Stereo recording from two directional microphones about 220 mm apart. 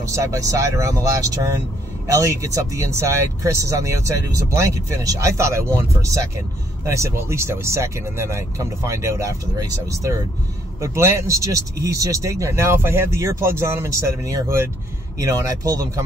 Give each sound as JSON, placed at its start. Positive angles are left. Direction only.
{"t": 0.0, "sound": "speech", "side_deg": -15}
{"t": 6.9, "sound": "speech", "side_deg": -15}